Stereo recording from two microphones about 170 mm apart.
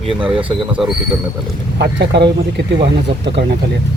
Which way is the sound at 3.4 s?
75° right (ahead or behind).